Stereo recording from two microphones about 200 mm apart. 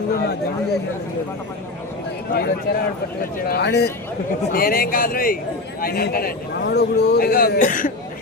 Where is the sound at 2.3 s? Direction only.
50° left (ahead or behind).